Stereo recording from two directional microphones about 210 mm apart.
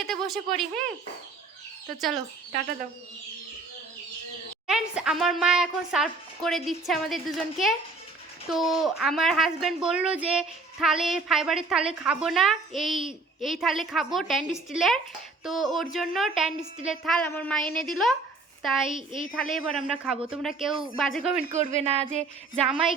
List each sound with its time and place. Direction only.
0.0 s a woman's voice: centre (ahead or behind)
4.6 s a woman's voice: 5° right (ahead or behind)
21.5 s speech: 35° right (ahead or behind)
22.5 s a woman's voice: centre (ahead or behind)